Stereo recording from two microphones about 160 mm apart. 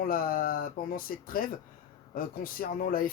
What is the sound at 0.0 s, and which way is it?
Speech, 65° left (ahead or behind).